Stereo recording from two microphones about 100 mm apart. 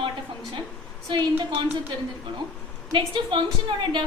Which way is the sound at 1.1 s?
50° right (ahead or behind).